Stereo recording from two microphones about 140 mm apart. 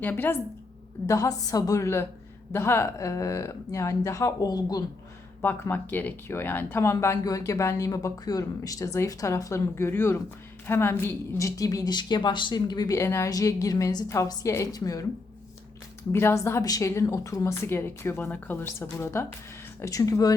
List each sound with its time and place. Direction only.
0.0 s speech: 15° left (ahead or behind)
5.4 s speech: 15° left (ahead or behind)
16.1 s speech: 20° left (ahead or behind)